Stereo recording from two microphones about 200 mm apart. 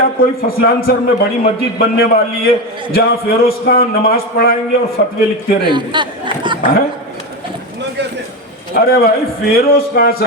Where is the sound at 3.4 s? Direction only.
50° left (ahead or behind).